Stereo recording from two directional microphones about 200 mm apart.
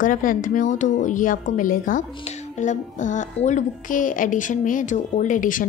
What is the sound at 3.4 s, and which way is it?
A woman's voice, 40° left (ahead or behind).